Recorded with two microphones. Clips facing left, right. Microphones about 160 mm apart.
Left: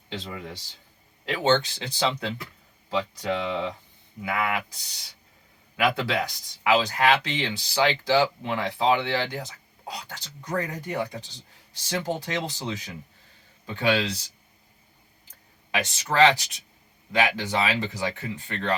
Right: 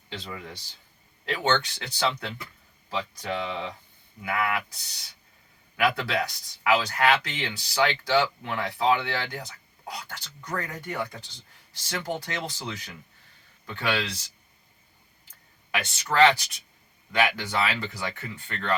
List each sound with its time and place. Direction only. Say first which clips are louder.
0.1 s speech: left 3 dB; 25° left (ahead or behind)
15.7 s speech: left 1 dB; 20° left (ahead or behind)